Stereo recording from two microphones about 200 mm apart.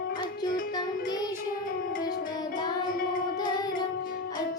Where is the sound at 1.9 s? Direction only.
45° left (ahead or behind).